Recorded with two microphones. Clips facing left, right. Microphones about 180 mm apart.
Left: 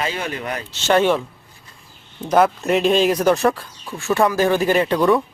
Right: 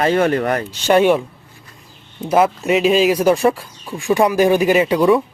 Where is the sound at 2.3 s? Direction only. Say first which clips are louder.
Right 1 dB; 5° right (ahead or behind).